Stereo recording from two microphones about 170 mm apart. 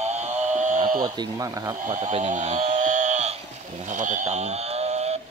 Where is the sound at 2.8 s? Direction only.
50° right (ahead or behind).